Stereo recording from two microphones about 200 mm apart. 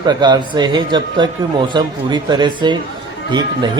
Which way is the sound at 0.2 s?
20° right (ahead or behind).